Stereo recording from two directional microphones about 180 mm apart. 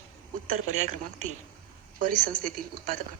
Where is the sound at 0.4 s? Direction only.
45° right (ahead or behind).